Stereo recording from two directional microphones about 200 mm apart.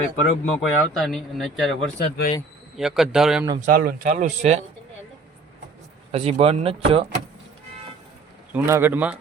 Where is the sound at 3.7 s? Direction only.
45° right (ahead or behind).